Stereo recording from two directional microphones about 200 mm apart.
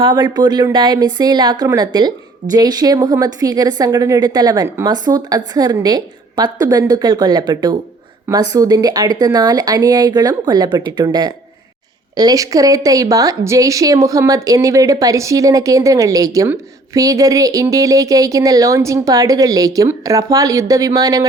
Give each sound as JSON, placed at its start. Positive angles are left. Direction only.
{"t": 0.0, "sound": "speech", "side_deg": -20}